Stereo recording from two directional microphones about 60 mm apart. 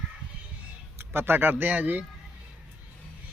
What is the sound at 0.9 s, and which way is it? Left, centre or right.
Speech, right.